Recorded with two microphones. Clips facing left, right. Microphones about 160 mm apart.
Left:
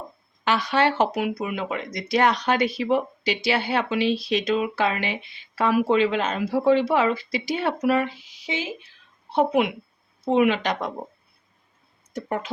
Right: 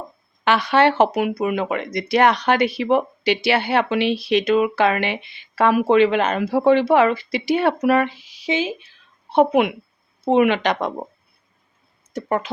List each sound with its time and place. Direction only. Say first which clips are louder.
0.4 s speech: right 5 dB; 65° right (ahead or behind); by 8.6 s 80° right
9.3 s speech: right 5 dB; 65° right (ahead or behind)
12.1 s speech: right 5 dB; 80° right